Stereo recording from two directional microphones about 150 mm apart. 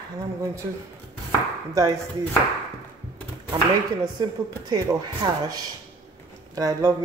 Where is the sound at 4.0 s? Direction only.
25° right (ahead or behind).